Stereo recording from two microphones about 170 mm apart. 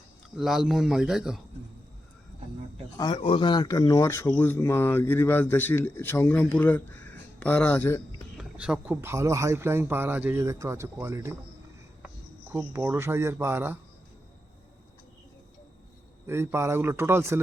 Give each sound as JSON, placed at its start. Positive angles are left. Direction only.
{"t": 0.3, "sound": "speech", "side_deg": 0}
{"t": 3.0, "sound": "speech", "side_deg": 30}
{"t": 8.4, "sound": "speech", "side_deg": -5}
{"t": 16.2, "sound": "speech", "side_deg": -15}